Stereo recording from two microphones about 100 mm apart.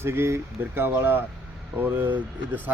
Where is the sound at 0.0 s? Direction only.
25° right (ahead or behind).